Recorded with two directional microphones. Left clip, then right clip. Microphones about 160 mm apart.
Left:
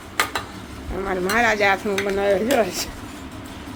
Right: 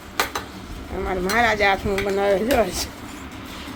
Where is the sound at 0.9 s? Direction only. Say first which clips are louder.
Even; 5° left (ahead or behind).